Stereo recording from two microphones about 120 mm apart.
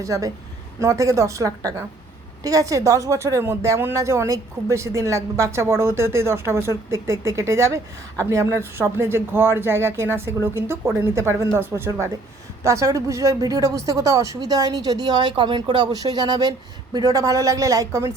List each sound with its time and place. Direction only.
0.0 s speech: 30° right (ahead or behind)